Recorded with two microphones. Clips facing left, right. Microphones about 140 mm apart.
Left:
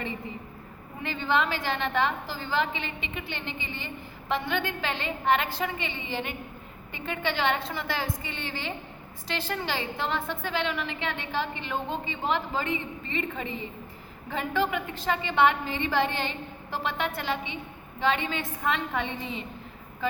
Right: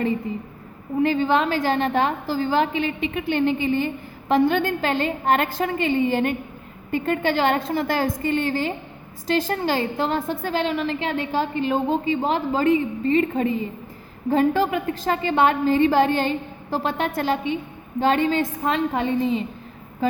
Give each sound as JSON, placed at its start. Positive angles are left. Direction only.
{"t": 1.0, "sound": "a woman's voice", "side_deg": -40}